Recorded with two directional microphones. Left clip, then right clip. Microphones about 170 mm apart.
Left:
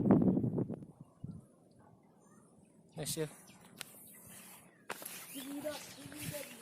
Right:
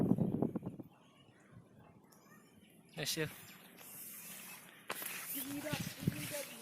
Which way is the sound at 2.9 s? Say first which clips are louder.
Right 1 dB; 15° left (ahead or behind).